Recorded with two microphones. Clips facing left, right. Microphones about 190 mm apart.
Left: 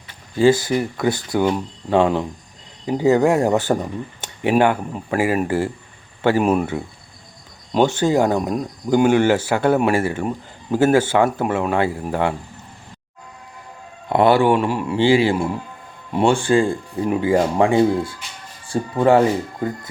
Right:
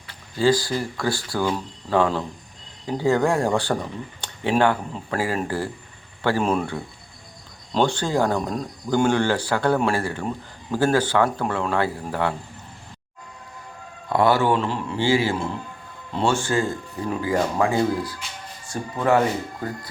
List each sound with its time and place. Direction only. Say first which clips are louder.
0.3 s speech: left 5 dB; 20° left (ahead or behind)
14.1 s speech: left 4 dB; 20° left (ahead or behind)
17.1 s speech: left 5 dB; 25° left (ahead or behind)